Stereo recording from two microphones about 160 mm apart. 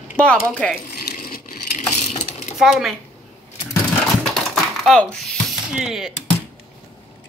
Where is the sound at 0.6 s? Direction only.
5° left (ahead or behind).